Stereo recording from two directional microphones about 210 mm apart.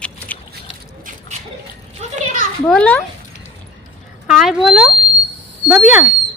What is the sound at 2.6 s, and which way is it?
Speech, 5° left (ahead or behind).